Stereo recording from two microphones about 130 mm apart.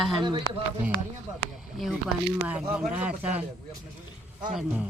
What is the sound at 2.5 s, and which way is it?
Speech, 10° right (ahead or behind).